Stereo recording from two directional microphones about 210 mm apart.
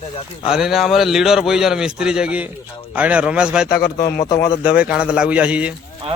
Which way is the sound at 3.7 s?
45° left (ahead or behind).